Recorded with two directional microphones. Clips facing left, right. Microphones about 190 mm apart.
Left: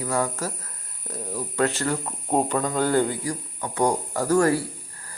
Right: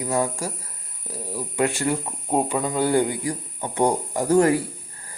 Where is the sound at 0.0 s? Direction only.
15° right (ahead or behind).